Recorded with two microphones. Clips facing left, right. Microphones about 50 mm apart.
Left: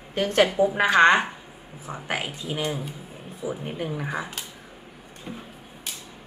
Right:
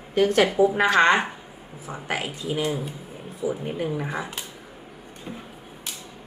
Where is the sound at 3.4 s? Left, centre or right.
Left.